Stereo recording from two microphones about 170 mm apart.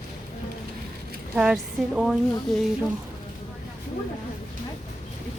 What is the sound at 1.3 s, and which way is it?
A woman's voice, 5° right (ahead or behind).